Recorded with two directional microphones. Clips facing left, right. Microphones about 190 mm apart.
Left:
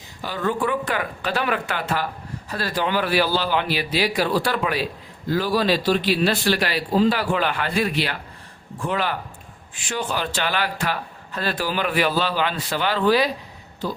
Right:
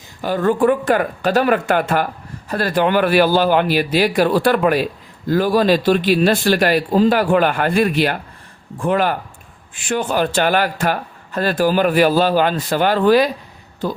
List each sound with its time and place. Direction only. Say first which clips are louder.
0.2 s speech: right 8 dB; 50° right (ahead or behind)